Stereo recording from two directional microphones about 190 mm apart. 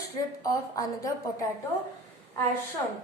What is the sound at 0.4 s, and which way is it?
A woman's voice, 15° left (ahead or behind).